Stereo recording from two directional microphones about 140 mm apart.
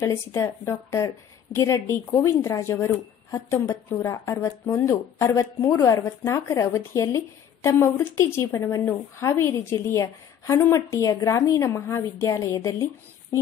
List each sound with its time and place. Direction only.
0.0 s a woman's voice: 20° left (ahead or behind)